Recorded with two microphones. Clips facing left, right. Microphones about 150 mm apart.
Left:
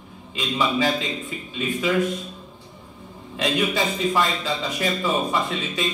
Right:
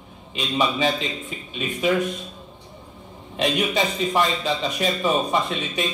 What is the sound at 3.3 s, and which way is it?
A man's voice, 20° right (ahead or behind).